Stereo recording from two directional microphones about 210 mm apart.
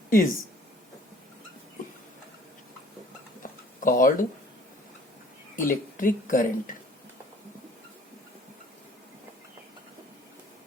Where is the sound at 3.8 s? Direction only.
40° left (ahead or behind).